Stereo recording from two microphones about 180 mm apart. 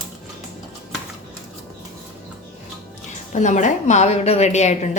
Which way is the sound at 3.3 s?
40° left (ahead or behind).